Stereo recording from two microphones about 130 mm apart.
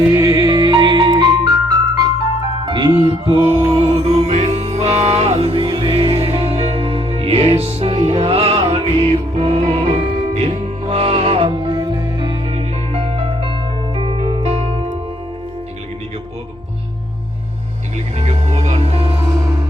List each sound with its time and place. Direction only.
0.1 s music: 25° right (ahead or behind)
0.7 s music: 40° right (ahead or behind)
3.8 s music: 55° right (ahead or behind); by 12.4 s 35° right (ahead or behind)
12.5 s music: 50° right (ahead or behind)
18.2 s music: 60° right (ahead or behind)